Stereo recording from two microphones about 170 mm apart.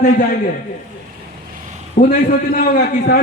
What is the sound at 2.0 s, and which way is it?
Speech, 50° left (ahead or behind).